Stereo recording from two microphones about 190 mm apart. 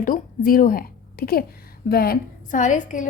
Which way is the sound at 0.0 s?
45° left (ahead or behind).